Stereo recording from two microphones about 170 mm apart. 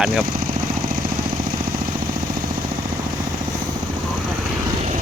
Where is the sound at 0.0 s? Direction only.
Centre (ahead or behind).